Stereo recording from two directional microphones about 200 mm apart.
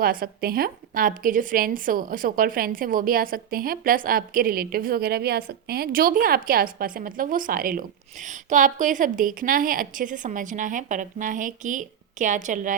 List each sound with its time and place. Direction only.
0.0 s a woman's voice: 45° right (ahead or behind)